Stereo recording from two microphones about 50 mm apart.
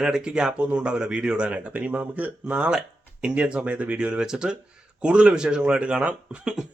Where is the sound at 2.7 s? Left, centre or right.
Centre.